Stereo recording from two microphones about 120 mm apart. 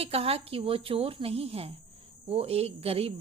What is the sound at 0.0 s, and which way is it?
A woman's voice, 55° right (ahead or behind).